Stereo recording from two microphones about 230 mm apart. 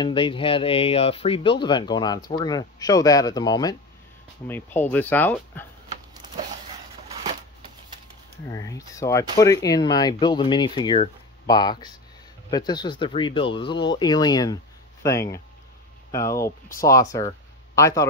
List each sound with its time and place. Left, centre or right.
0.0 s speech: left
5.9 s a sound: centre
8.5 s speech: centre